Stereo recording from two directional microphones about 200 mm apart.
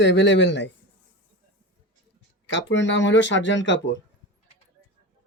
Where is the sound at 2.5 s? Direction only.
65° left (ahead or behind).